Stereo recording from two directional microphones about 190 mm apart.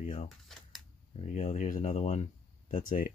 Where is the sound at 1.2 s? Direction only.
35° left (ahead or behind).